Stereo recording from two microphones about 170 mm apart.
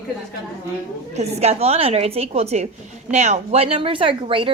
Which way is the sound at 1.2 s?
40° right (ahead or behind).